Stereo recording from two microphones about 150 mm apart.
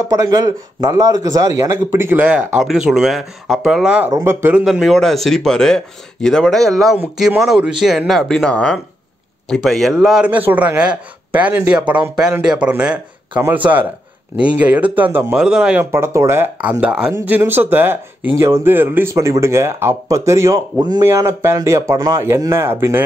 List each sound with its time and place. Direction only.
0.1 s speech: 20° right (ahead or behind)
4.6 s speech: centre (ahead or behind)
15.8 s speech: 15° right (ahead or behind)